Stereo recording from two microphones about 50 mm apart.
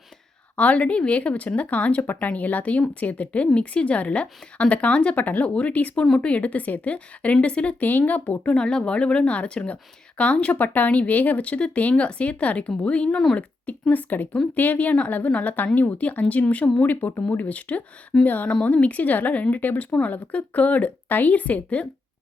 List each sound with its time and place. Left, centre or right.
0.5 s speech: left
7.9 s speech: left
8.5 s speech: centre
13.9 s speech: left